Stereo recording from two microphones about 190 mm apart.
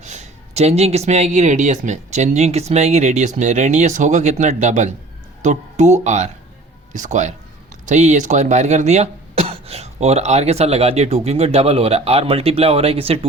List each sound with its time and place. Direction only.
0.0 s speech: 40° right (ahead or behind)